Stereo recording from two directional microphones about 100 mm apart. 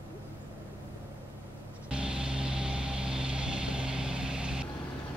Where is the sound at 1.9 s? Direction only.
10° right (ahead or behind).